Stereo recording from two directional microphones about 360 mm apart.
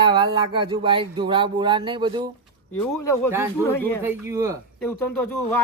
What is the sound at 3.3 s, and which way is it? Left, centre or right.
Speech, centre.